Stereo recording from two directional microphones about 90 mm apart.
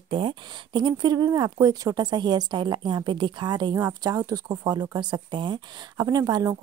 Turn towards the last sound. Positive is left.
turn(degrees=-45)  # may be behind; listen again after turning